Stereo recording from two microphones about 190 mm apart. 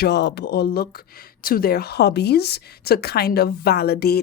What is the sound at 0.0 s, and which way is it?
Speech, 60° left (ahead or behind).